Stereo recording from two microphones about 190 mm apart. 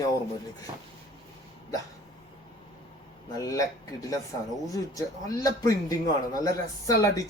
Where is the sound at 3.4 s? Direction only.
15° left (ahead or behind).